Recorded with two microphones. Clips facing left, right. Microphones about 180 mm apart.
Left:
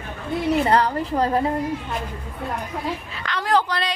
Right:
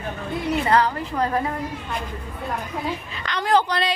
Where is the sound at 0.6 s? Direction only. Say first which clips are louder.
Left 1 dB; 30° left (ahead or behind).